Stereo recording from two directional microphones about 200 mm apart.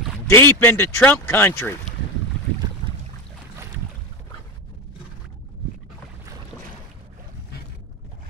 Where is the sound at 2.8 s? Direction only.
20° left (ahead or behind).